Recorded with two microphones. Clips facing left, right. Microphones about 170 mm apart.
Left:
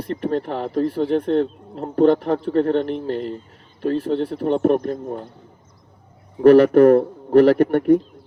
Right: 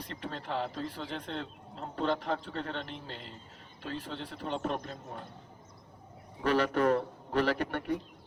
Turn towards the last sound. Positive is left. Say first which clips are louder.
# left 17 dB
turn(degrees=50)  # may be behind; listen again after turning